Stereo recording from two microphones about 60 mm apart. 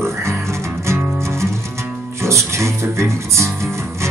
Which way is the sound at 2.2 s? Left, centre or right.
Right.